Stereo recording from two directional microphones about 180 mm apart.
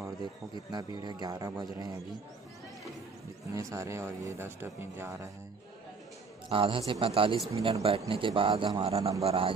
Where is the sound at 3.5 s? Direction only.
15° right (ahead or behind).